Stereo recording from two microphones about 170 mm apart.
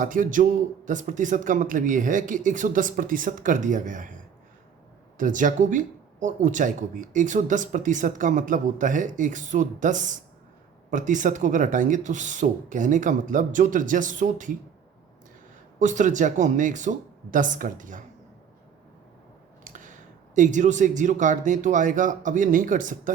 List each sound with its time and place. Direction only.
0.0 s speech: 50° right (ahead or behind)
15.8 s speech: 45° right (ahead or behind)
19.6 s speech: 50° right (ahead or behind)